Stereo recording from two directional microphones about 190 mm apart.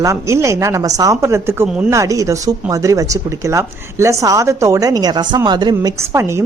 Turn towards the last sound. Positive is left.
turn(degrees=-15)  # may be behind; listen again after turning